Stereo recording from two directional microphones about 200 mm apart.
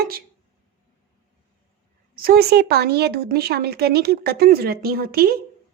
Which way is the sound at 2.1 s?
50° right (ahead or behind).